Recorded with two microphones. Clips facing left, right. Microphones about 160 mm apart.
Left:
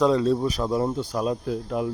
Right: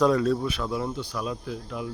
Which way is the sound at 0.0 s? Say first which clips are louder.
Left 2 dB; 25° left (ahead or behind).